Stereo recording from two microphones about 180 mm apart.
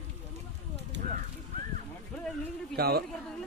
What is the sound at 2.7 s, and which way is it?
Speech, 60° right (ahead or behind).